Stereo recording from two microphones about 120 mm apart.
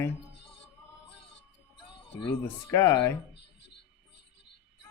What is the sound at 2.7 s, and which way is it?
Speech, 30° left (ahead or behind).